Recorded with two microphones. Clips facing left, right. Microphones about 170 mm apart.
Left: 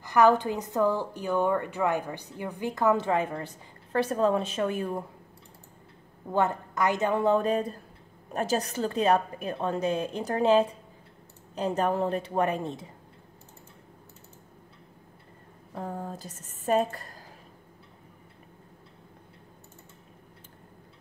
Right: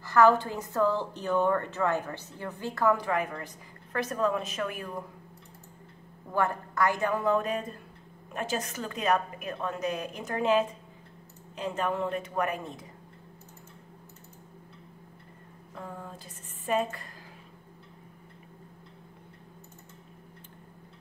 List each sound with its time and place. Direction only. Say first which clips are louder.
0.0 s a woman's voice: left 1 dB; 15° left (ahead or behind)
6.3 s a woman's voice: left 2 dB; 20° left (ahead or behind)
15.7 s a woman's voice: left 6 dB; 40° left (ahead or behind)